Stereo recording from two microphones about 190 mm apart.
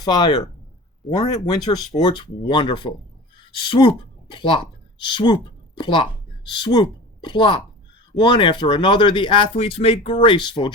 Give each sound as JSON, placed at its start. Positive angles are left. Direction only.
{"t": 0.0, "sound": "a woman's voice", "side_deg": 25}